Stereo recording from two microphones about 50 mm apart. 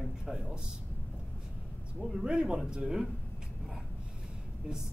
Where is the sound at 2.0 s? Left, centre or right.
Centre.